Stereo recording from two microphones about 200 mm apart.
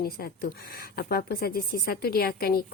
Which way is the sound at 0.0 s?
50° left (ahead or behind).